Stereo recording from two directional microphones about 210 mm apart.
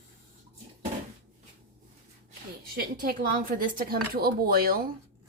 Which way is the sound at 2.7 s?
45° right (ahead or behind).